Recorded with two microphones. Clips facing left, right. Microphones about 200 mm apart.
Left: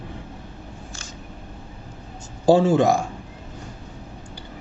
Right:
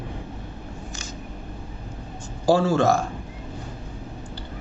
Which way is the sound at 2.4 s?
20° left (ahead or behind).